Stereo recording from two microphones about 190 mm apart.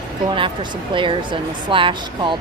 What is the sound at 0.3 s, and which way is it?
Speech, 25° right (ahead or behind).